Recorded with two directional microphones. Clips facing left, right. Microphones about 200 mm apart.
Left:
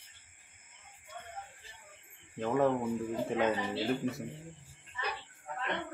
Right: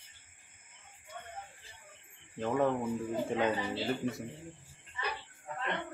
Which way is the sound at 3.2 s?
Centre (ahead or behind).